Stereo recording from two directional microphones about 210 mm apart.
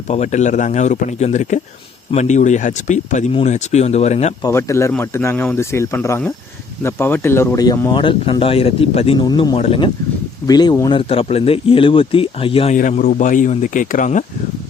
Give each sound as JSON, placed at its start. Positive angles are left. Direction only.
{"t": 0.1, "sound": "speech", "side_deg": 35}
{"t": 4.4, "sound": "speech", "side_deg": 15}
{"t": 12.7, "sound": "speech", "side_deg": 40}